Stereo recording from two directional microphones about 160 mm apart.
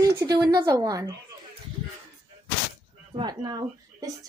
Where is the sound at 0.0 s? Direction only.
20° right (ahead or behind).